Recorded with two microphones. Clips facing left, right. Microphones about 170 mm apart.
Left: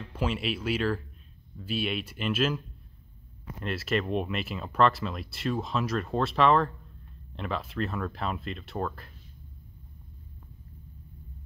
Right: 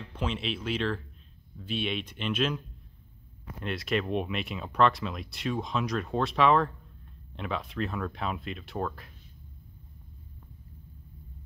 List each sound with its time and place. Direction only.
0.1 s speech: 5° left (ahead or behind)
3.6 s speech: centre (ahead or behind)